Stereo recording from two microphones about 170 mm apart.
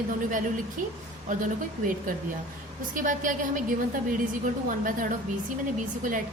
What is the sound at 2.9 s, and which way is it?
Speech, 50° right (ahead or behind).